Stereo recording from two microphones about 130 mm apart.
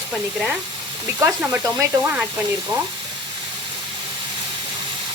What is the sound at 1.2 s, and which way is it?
Speech, 20° right (ahead or behind).